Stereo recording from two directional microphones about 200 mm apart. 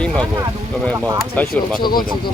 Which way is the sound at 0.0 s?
5° left (ahead or behind).